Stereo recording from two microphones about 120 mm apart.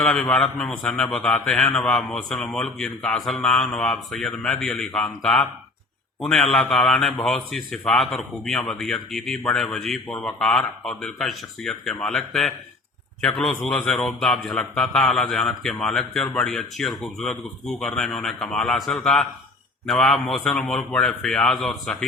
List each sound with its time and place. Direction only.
0.0 s a man's voice: 5° left (ahead or behind)